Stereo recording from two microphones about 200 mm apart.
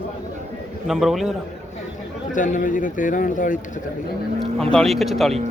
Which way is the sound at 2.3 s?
40° left (ahead or behind).